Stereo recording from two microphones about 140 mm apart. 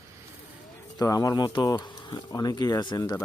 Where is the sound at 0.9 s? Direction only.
25° left (ahead or behind).